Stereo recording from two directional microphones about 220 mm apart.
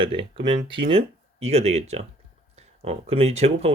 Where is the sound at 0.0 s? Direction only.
25° right (ahead or behind).